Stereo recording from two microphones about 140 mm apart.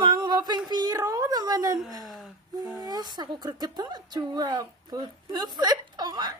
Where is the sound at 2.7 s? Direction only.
30° right (ahead or behind).